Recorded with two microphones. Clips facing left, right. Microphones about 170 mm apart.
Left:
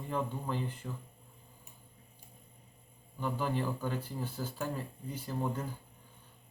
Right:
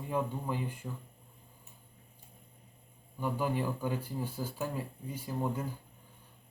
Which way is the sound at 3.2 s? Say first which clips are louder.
Right 1 dB; 10° right (ahead or behind).